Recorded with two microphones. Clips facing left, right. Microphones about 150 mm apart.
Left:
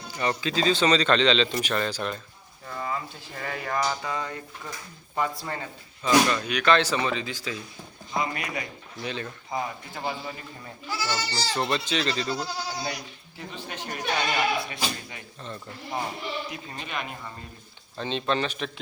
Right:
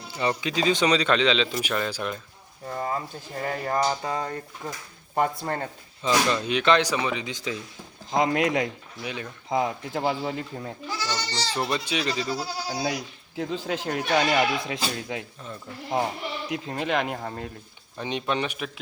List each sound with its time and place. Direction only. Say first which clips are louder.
0.2 s speech: right 1 dB; 15° right (ahead or behind)
2.6 s speech: right 3 dB; 40° right (ahead or behind)
5.1 s speech: right 4 dB; 50° right (ahead or behind)
6.0 s speech: left 2 dB; 25° right (ahead or behind)
8.1 s speech: right 7 dB; 90° right
9.0 s speech: left 2 dB; 10° right (ahead or behind)
9.5 s speech: right 8 dB; 90° right; by 10.7 s 75° right (ahead or behind)
10.8 s speech: left 2 dB; 10° left (ahead or behind)
11.5 s speech: even; 10° right (ahead or behind)
12.8 s speech: right 5 dB; 90° right
16.5 s speech: right 9 dB; 90° right
17.2 s speech: right 7 dB; 65° right (ahead or behind)
17.9 s speech: left 1 dB; 15° right (ahead or behind)